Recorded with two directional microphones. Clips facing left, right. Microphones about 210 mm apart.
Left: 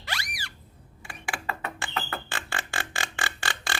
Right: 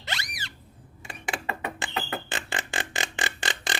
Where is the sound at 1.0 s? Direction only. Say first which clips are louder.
Right 2 dB; 20° right (ahead or behind).